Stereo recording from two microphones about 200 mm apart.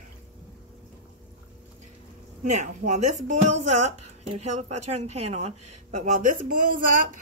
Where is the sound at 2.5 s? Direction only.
35° right (ahead or behind).